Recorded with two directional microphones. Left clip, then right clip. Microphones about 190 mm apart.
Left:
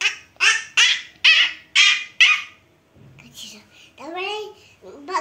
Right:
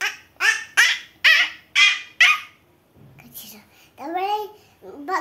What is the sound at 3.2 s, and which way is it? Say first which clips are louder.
Whispering: left 5 dB; 25° right (ahead or behind).